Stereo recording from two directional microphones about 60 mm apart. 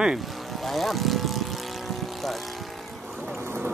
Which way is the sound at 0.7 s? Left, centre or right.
Centre.